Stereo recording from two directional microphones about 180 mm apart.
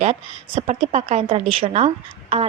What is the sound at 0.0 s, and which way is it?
A woman's voice, 35° right (ahead or behind).